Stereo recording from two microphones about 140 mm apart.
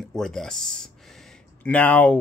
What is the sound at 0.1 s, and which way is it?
Speech, 5° left (ahead or behind).